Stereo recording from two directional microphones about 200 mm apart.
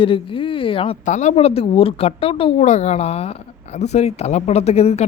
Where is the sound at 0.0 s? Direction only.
25° left (ahead or behind).